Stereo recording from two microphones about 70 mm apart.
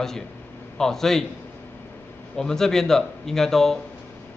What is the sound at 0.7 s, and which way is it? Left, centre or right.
Speech, centre.